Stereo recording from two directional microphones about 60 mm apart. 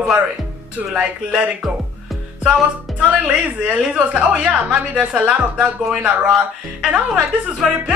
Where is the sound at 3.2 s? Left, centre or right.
Centre.